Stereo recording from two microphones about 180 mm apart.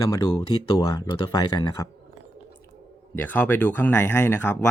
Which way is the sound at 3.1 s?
10° left (ahead or behind).